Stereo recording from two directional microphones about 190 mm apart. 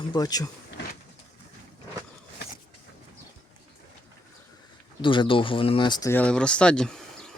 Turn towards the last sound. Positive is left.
turn(degrees=5)  # may be behind; listen again after turning